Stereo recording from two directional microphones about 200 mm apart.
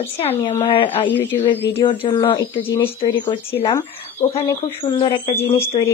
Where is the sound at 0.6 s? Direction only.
25° left (ahead or behind).